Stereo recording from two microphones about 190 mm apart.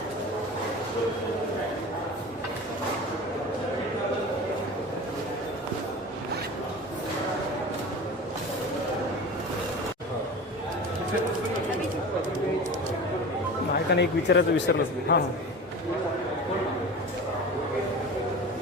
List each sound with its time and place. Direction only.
13.7 s a man's voice: 65° left (ahead or behind)